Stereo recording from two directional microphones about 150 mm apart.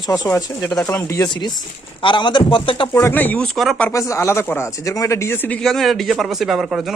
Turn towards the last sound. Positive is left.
turn(degrees=0)  # may be behind; listen again after turning